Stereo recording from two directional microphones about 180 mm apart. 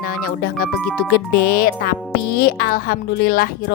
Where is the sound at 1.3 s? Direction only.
60° left (ahead or behind).